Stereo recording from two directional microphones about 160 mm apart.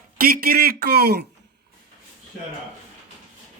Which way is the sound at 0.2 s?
65° right (ahead or behind).